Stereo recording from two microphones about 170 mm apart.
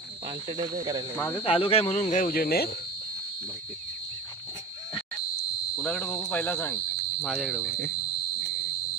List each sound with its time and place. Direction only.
0.5 s speech: 25° right (ahead or behind)
1.4 s speech: 35° left (ahead or behind); by 2.7 s 60° left (ahead or behind)
5.8 s speech: 5° left (ahead or behind)